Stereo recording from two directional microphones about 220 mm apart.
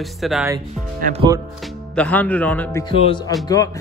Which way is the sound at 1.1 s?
20° right (ahead or behind).